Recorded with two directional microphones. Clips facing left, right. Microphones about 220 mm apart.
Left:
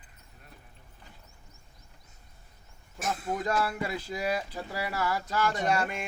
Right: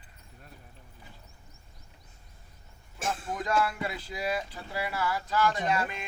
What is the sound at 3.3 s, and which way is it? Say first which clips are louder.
Speech: even; 40° left (ahead or behind).